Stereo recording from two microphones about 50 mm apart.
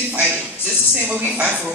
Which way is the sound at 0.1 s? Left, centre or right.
Right.